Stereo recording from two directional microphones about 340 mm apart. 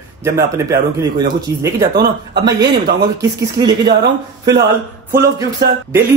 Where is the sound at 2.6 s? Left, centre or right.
Right.